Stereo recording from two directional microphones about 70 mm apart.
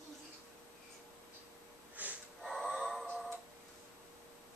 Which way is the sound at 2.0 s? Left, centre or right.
Right.